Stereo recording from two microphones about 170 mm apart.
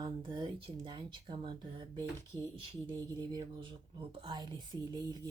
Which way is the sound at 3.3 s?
30° right (ahead or behind).